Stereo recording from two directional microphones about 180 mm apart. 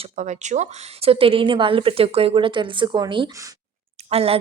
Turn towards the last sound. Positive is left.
turn(degrees=-35)  # may be behind; listen again after turning